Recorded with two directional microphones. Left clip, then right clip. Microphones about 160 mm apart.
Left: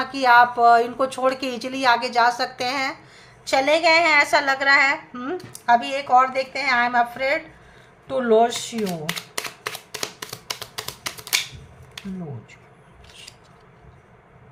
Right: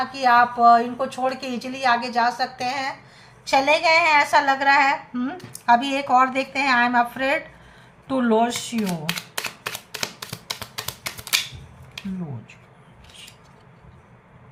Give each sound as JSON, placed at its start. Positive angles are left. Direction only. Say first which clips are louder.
{"t": 0.0, "sound": "speech", "louder": "left 2 dB", "side_deg": 30}
{"t": 3.4, "sound": "a woman's voice", "louder": "even", "side_deg": 20}
{"t": 9.9, "sound": "a sound", "louder": "right 1 dB", "side_deg": 10}